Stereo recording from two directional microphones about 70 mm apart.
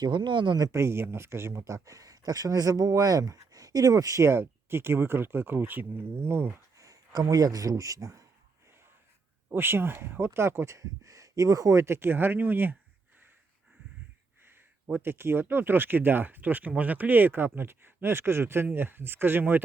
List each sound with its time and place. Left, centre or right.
0.0 s speech: right
0.7 s speech: right
4.3 s speech: right
6.7 s speech: right
9.5 s speech: right
10.8 s speech: right
14.9 s speech: right